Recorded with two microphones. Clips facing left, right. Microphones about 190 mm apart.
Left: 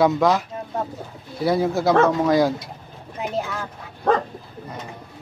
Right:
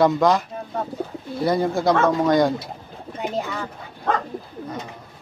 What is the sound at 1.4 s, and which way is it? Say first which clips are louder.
Speech: even; centre (ahead or behind).